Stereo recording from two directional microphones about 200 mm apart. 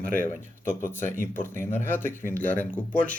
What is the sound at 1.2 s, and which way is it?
Speech, 10° left (ahead or behind).